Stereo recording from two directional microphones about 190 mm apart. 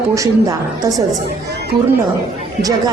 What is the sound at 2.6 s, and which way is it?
Speech, 20° right (ahead or behind).